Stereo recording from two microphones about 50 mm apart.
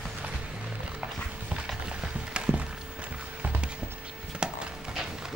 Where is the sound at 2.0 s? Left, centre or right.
Right.